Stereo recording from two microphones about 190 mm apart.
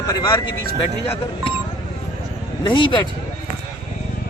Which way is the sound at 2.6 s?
25° left (ahead or behind).